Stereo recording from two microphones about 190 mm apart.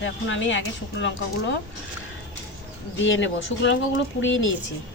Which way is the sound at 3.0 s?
85° left.